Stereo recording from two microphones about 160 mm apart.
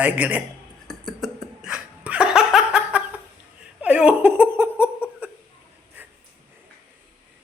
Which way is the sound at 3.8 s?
10° right (ahead or behind).